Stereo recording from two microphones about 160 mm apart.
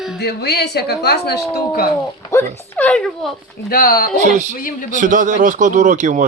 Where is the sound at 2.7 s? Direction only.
10° left (ahead or behind).